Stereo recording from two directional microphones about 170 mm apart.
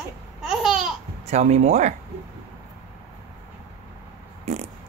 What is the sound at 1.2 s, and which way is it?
Speech, 40° right (ahead or behind).